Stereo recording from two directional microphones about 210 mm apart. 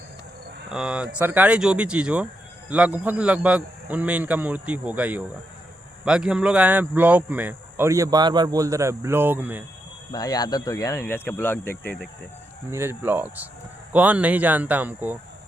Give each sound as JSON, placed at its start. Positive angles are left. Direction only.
{"t": 0.7, "sound": "speech", "side_deg": -5}
{"t": 10.1, "sound": "speech", "side_deg": 20}
{"t": 11.7, "sound": "speech", "side_deg": 45}
{"t": 12.7, "sound": "speech", "side_deg": -10}